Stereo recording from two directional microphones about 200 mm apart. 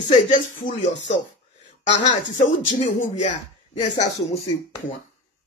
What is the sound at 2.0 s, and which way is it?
Speech, 40° left (ahead or behind).